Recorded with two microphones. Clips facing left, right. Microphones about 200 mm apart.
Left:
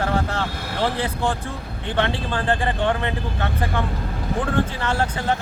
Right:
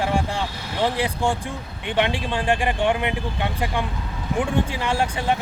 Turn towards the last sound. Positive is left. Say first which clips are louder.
# even
turn(degrees=-15)  # may be behind; listen again after turning